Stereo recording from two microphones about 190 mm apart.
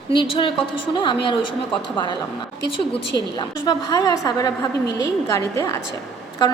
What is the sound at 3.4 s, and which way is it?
A woman's voice, 20° left (ahead or behind).